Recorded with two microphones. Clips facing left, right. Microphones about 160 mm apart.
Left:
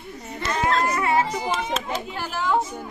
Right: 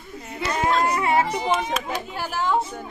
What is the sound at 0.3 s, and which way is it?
Children playing, 5° right (ahead or behind).